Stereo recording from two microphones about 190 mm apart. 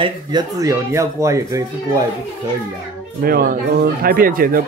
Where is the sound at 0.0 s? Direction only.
20° right (ahead or behind).